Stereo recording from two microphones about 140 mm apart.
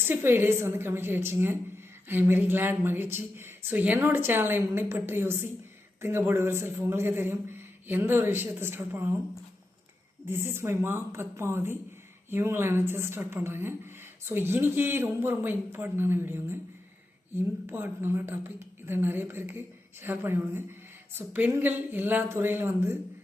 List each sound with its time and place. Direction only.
0.0 s a woman's voice: 15° right (ahead or behind)
10.2 s a woman's voice: 15° right (ahead or behind)